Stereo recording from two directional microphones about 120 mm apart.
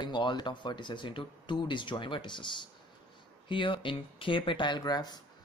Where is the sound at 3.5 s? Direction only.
45° left (ahead or behind).